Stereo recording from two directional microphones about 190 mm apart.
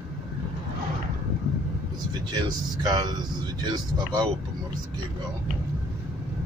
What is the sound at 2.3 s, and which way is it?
Speech, 20° right (ahead or behind).